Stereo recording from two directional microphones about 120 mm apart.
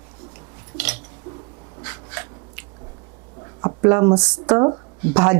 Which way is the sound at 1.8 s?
25° right (ahead or behind).